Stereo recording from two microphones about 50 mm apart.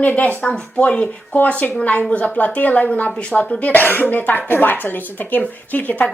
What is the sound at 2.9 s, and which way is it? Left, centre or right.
A woman's voice, left.